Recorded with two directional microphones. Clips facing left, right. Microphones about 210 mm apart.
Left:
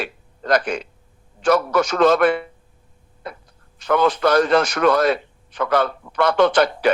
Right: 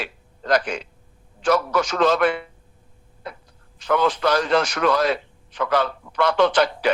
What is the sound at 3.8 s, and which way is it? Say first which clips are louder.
A man's voice: left 3 dB; 55° left (ahead or behind).